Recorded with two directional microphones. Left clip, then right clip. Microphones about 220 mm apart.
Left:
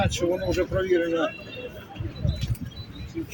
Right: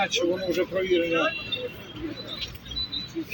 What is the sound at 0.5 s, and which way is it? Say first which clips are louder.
Speech: left 1 dB; 20° left (ahead or behind).